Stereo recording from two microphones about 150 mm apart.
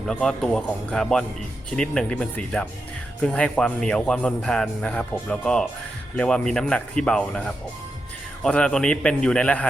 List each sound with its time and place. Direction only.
0.1 s a man's voice: 5° left (ahead or behind)